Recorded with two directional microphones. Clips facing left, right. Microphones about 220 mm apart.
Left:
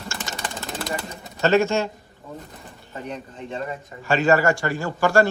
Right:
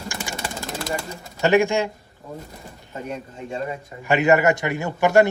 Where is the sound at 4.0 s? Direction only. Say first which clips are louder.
Right 1 dB; 20° right (ahead or behind).